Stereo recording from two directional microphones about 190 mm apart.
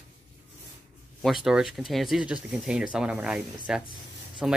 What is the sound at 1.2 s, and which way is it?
Speech, centre (ahead or behind).